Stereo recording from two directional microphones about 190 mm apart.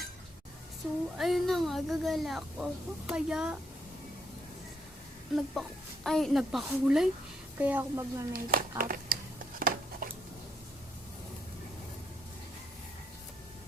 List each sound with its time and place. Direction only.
0.8 s a woman's voice: 5° right (ahead or behind)
5.3 s a woman's voice: centre (ahead or behind); by 8.3 s 15° right (ahead or behind)
8.3 s speech: 50° right (ahead or behind)
8.8 s a sound: 50° right (ahead or behind)